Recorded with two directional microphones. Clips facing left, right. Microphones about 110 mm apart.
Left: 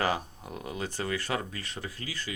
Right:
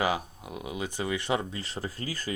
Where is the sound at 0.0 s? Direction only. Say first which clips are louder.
Right 1 dB; 10° right (ahead or behind).